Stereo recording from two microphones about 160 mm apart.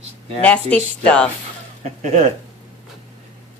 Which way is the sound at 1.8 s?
45° right (ahead or behind).